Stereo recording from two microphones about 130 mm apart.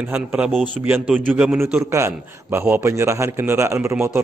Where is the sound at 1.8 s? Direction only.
20° right (ahead or behind).